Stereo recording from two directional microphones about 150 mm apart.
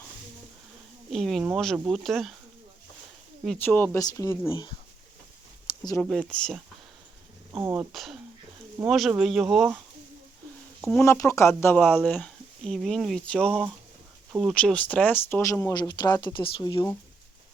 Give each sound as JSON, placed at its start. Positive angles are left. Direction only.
{"t": 1.1, "sound": "speech", "side_deg": 0}
{"t": 3.6, "sound": "speech", "side_deg": 10}
{"t": 6.0, "sound": "speech", "side_deg": 5}
{"t": 7.6, "sound": "speech", "side_deg": -10}
{"t": 7.9, "sound": "speech", "side_deg": 0}
{"t": 10.8, "sound": "a sound", "side_deg": 0}
{"t": 11.0, "sound": "speech", "side_deg": 20}
{"t": 15.7, "sound": "speech", "side_deg": 30}